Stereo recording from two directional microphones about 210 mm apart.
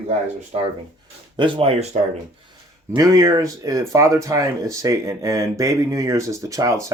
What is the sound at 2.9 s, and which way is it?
Speech, 15° right (ahead or behind).